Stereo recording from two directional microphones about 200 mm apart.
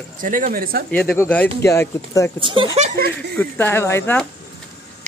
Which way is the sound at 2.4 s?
25° right (ahead or behind).